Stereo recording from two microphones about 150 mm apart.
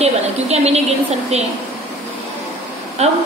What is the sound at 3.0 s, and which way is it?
Speech, 45° right (ahead or behind).